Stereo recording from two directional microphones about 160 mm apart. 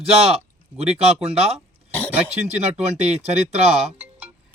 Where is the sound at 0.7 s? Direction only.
40° right (ahead or behind).